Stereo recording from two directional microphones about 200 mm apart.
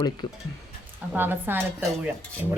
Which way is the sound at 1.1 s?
10° right (ahead or behind).